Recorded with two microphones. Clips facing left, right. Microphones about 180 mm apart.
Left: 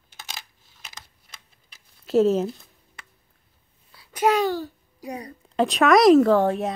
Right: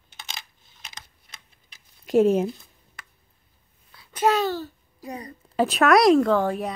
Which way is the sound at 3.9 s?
10° left (ahead or behind).